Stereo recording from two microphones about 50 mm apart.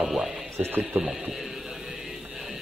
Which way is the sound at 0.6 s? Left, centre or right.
Right.